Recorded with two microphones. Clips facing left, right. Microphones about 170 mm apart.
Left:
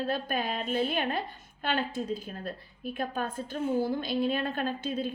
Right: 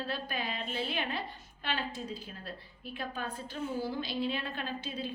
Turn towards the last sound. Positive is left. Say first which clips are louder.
# left 7 dB
turn(degrees=50)  # may be behind; listen again after turning